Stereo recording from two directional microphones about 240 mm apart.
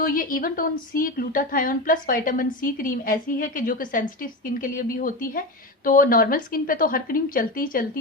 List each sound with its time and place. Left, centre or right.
0.0 s a woman's voice: left